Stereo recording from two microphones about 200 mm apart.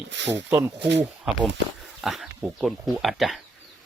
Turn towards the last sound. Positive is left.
turn(degrees=0)  # may be behind; listen again after turning